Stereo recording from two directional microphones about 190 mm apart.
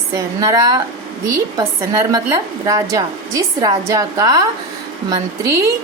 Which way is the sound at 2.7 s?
15° right (ahead or behind).